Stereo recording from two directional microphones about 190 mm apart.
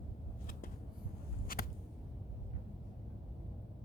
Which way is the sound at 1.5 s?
50° left (ahead or behind).